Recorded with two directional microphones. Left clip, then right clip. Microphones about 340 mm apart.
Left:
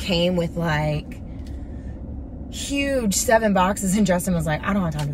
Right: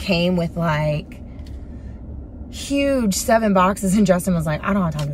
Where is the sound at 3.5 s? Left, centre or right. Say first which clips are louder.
Right 3 dB; centre.